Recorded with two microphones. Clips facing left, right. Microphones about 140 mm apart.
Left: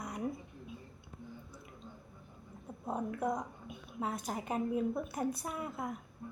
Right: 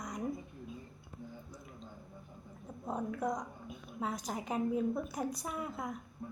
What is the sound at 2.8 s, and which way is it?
A woman's voice, 5° left (ahead or behind).